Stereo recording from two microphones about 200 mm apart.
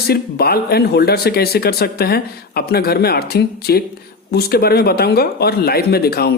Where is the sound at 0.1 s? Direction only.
50° left (ahead or behind).